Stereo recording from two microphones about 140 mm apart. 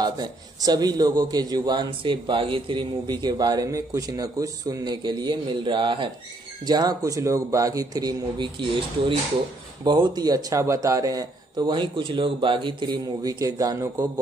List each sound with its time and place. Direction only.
0.0 s a man's voice: 30° right (ahead or behind)
9.8 s a man's voice: 30° right (ahead or behind)